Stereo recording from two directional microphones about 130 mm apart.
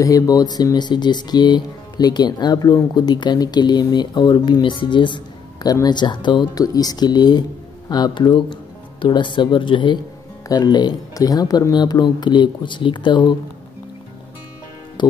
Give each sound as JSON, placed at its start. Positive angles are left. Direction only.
{"t": 0.0, "sound": "speech", "side_deg": 25}
{"t": 15.0, "sound": "music", "side_deg": 35}